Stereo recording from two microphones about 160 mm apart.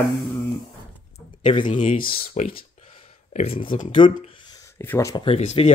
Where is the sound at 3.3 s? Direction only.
40° left (ahead or behind).